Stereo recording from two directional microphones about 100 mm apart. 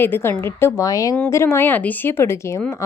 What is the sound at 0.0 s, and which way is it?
Speech, 20° left (ahead or behind).